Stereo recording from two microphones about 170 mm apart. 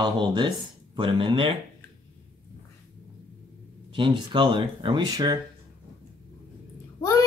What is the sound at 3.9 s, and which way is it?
Speech, 30° right (ahead or behind).